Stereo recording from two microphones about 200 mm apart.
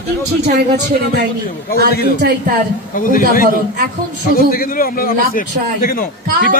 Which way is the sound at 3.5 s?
45° right (ahead or behind).